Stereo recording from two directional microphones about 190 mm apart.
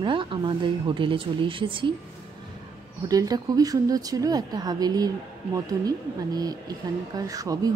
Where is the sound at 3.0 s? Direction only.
20° right (ahead or behind).